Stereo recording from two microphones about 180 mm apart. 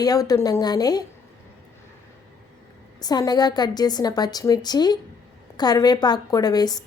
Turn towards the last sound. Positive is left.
turn(degrees=20)  # may be behind; listen again after turning